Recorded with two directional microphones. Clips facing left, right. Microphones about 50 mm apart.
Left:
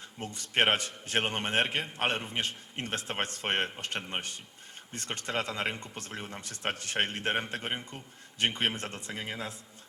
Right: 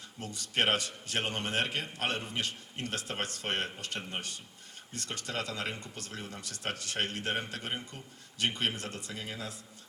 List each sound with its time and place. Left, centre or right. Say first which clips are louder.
0.2 s speech: left 3 dB; left